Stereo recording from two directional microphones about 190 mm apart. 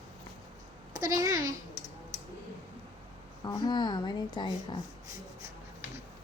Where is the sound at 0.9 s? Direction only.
15° right (ahead or behind).